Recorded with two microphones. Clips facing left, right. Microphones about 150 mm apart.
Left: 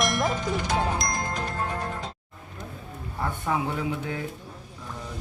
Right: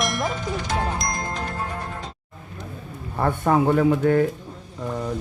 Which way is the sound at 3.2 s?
60° right (ahead or behind).